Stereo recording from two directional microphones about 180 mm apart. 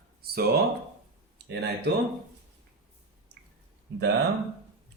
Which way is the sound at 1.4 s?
65° right (ahead or behind).